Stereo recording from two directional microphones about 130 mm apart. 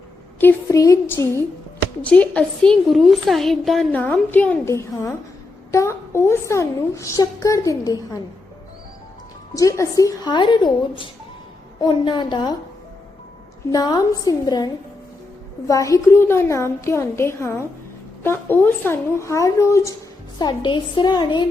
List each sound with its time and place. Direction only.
0.3 s a sound: 15° left (ahead or behind)
0.8 s a woman's voice: 20° left (ahead or behind); by 3.8 s centre (ahead or behind)
3.9 s a woman's voice: 10° left (ahead or behind)
9.6 s a woman's voice: 25° left (ahead or behind)
10.3 s a woman's voice: 35° left (ahead or behind)
13.7 s a woman's voice: 30° left (ahead or behind)
20.4 s a woman's voice: 35° left (ahead or behind)